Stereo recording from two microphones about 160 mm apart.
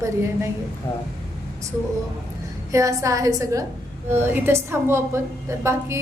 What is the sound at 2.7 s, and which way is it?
A woman's voice, 20° right (ahead or behind).